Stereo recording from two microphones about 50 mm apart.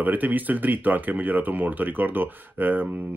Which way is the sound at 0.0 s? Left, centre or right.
Right.